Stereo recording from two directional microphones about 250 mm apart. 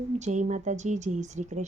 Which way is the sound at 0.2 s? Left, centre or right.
Right.